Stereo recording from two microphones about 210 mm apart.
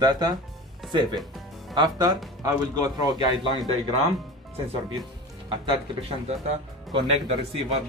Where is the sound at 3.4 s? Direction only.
20° left (ahead or behind).